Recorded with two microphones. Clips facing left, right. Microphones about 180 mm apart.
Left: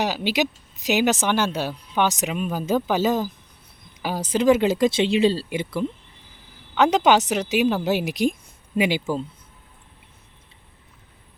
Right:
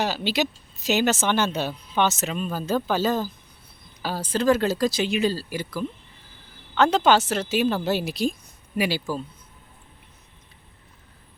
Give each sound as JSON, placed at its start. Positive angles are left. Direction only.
{"t": 0.0, "sound": "speech", "side_deg": 15}